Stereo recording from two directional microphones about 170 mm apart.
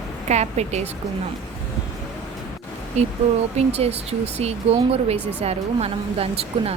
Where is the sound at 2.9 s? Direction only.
40° right (ahead or behind).